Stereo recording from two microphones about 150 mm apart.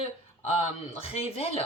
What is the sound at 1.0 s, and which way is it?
Speech, 40° left (ahead or behind).